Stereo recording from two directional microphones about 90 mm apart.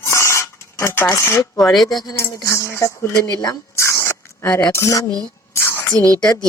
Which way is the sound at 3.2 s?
45° left (ahead or behind).